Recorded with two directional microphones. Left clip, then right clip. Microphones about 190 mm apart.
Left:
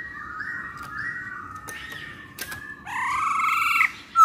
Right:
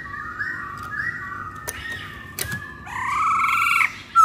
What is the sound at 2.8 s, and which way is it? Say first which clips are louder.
Frog: right 3 dB; 20° left (ahead or behind).